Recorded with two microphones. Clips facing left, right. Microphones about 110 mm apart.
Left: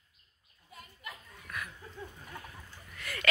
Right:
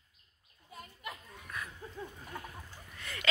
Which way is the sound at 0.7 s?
25° right (ahead or behind).